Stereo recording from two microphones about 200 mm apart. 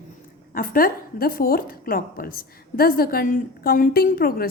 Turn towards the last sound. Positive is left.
turn(degrees=45)  # may be behind; listen again after turning